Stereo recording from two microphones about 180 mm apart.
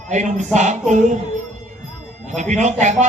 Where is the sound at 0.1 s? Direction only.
40° right (ahead or behind).